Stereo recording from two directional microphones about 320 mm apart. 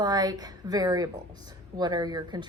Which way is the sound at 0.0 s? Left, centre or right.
Centre.